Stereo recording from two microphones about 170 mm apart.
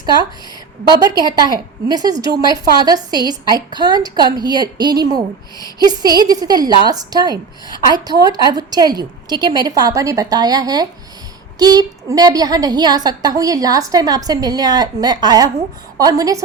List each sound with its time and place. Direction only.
0.9 s a woman's voice: 25° right (ahead or behind)